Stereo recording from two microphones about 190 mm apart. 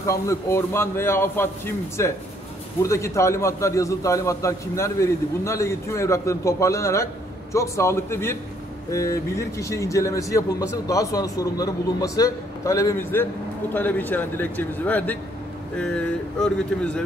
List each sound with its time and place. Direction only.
0.0 s a man's voice: 15° left (ahead or behind)